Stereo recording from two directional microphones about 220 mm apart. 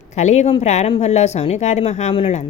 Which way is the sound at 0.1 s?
30° left (ahead or behind).